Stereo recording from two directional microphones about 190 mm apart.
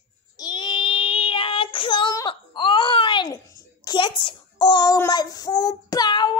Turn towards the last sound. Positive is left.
turn(degrees=20)  # may be behind; listen again after turning